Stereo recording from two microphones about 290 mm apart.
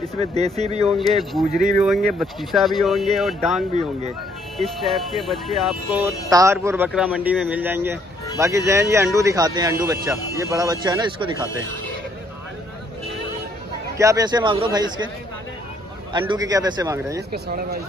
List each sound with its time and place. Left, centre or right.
0.2 s speech: right
1.8 s speech: centre
13.9 s speech: centre
16.1 s speech: centre
17.3 s speech: right